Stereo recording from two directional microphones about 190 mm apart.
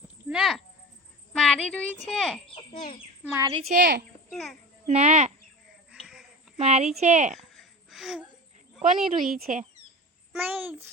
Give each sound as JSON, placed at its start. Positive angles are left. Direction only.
{"t": 0.3, "sound": "a sound", "side_deg": 0}
{"t": 1.3, "sound": "speech", "side_deg": 5}
{"t": 3.2, "sound": "a child's voice", "side_deg": -15}
{"t": 3.8, "sound": "a woman's voice", "side_deg": -55}
{"t": 4.3, "sound": "a child's voice", "side_deg": 0}
{"t": 4.9, "sound": "speech", "side_deg": -35}
{"t": 5.9, "sound": "a sound", "side_deg": -5}
{"t": 6.6, "sound": "speech", "side_deg": -35}
{"t": 7.3, "sound": "a sound", "side_deg": 0}
{"t": 8.8, "sound": "speech", "side_deg": -45}
{"t": 10.4, "sound": "a child's voice", "side_deg": -10}